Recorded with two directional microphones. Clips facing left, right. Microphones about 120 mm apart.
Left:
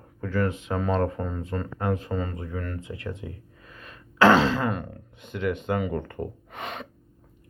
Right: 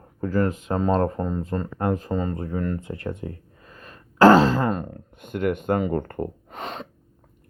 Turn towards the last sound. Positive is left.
turn(degrees=-35)  # may be behind; listen again after turning